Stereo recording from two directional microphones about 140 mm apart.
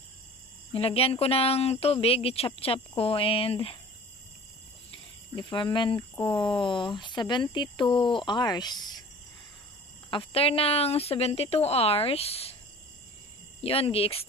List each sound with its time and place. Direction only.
0.7 s speech: 45° left (ahead or behind)
5.3 s speech: 35° left (ahead or behind)
10.1 s speech: 45° left (ahead or behind)
13.6 s speech: 45° left (ahead or behind)